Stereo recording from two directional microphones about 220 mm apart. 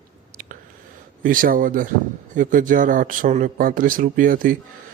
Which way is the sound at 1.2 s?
40° right (ahead or behind).